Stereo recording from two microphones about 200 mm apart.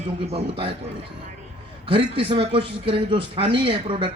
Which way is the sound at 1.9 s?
25° right (ahead or behind).